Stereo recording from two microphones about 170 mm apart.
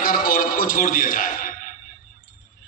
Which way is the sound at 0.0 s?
55° left (ahead or behind).